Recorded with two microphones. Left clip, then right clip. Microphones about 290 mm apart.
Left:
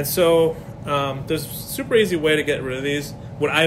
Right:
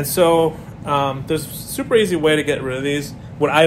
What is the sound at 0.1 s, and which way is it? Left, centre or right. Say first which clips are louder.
A man's voice: right 2 dB; centre.